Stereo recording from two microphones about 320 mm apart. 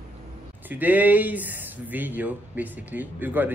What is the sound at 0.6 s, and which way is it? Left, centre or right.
Speech, centre.